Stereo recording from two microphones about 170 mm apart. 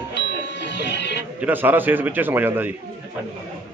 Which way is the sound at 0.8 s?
90° left.